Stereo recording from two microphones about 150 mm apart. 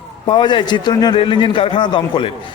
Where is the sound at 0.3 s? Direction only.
30° left (ahead or behind).